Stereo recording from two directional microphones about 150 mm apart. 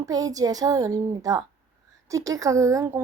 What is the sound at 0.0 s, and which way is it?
A woman's voice, 25° right (ahead or behind).